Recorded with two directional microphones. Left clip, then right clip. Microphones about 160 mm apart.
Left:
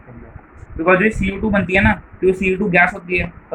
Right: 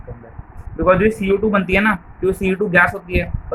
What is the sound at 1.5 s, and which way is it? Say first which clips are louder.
Speech: even; 60° right (ahead or behind).